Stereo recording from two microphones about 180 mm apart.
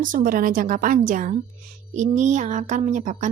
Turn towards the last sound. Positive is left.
turn(degrees=-40)  # may be behind; listen again after turning